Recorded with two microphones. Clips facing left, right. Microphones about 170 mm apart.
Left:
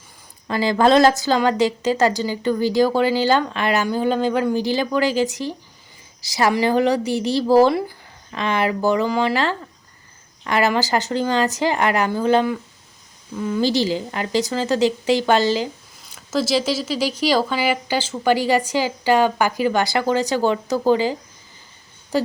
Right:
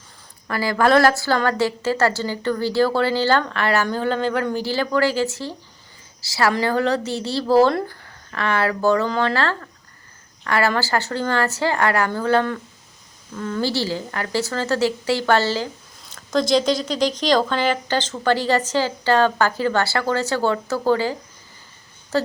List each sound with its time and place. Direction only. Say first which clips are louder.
0.4 s speech: left 2 dB; 20° left (ahead or behind)